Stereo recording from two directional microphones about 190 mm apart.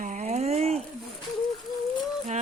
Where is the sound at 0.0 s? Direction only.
40° right (ahead or behind).